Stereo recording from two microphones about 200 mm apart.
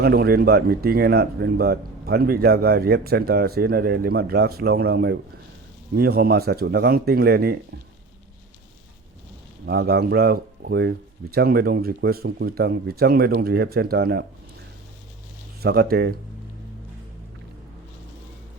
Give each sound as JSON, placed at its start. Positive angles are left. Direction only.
{"t": 0.0, "sound": "speech", "side_deg": -55}
{"t": 9.6, "sound": "speech", "side_deg": -55}
{"t": 15.6, "sound": "speech", "side_deg": -50}